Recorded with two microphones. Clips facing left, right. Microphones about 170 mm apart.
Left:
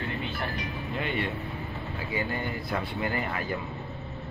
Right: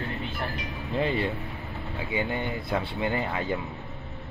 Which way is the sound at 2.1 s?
20° right (ahead or behind).